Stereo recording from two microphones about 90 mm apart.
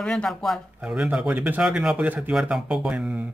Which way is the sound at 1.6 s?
5° right (ahead or behind).